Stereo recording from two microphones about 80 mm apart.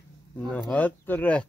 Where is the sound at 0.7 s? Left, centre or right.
Left.